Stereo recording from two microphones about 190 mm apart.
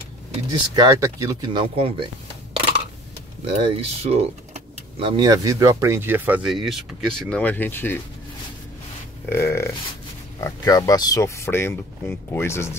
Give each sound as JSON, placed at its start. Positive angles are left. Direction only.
{"t": 0.5, "sound": "speech", "side_deg": -20}
{"t": 3.4, "sound": "speech", "side_deg": -30}
{"t": 9.3, "sound": "speech", "side_deg": 15}